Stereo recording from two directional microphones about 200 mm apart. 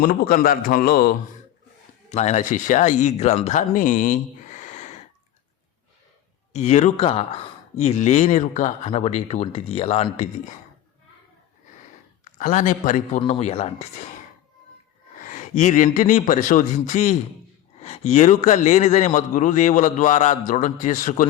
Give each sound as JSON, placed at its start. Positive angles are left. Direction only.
{"t": 0.0, "sound": "a man's voice", "side_deg": 45}
{"t": 2.0, "sound": "speech", "side_deg": 35}
{"t": 6.5, "sound": "speech", "side_deg": 35}
{"t": 12.2, "sound": "speech", "side_deg": 40}
{"t": 15.2, "sound": "speech", "side_deg": 40}